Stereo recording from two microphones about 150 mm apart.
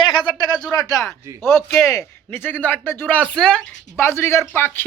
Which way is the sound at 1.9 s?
15° left (ahead or behind).